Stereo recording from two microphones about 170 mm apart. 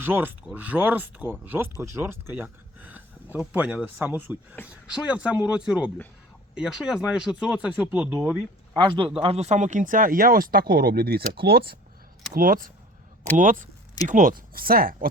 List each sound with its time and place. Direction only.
0.0 s speech: 10° right (ahead or behind)
8.7 s a man's voice: 25° right (ahead or behind)
9.2 s speech: 35° right (ahead or behind); by 15.1 s 60° right (ahead or behind)